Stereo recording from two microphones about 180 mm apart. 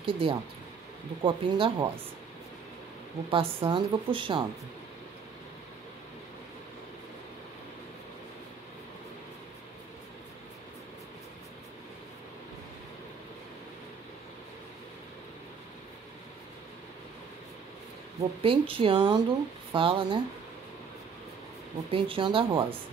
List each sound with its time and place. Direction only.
0.0 s speech: 30° right (ahead or behind)
3.3 s speech: 30° right (ahead or behind)
18.4 s speech: 30° right (ahead or behind)
21.9 s speech: 30° right (ahead or behind)